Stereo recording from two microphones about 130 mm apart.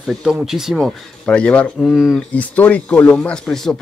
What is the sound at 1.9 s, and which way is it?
Speech, 5° right (ahead or behind).